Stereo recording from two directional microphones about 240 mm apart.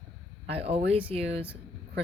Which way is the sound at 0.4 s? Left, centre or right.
Right.